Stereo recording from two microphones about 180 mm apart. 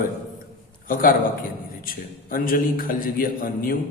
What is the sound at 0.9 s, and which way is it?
A man's voice, 50° left (ahead or behind).